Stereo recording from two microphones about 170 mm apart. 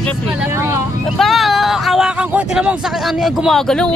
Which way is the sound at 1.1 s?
Centre (ahead or behind).